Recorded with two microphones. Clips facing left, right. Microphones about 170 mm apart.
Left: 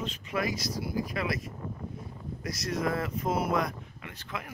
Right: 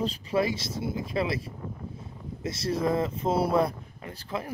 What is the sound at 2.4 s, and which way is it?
Speech, 30° right (ahead or behind).